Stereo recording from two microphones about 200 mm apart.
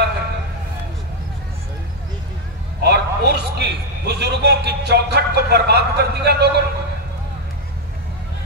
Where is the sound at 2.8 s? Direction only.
55° right (ahead or behind).